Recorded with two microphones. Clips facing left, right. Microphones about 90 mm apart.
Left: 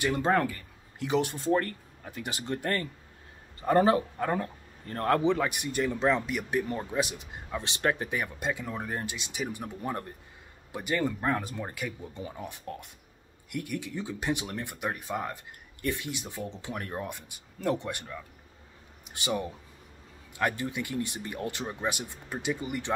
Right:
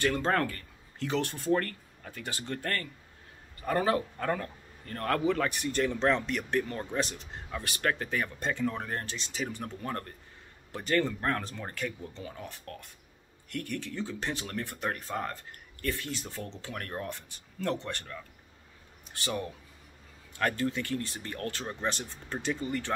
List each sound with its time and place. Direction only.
0.0 s a man's voice: 15° left (ahead or behind)
5.4 s a man's voice: 15° left (ahead or behind)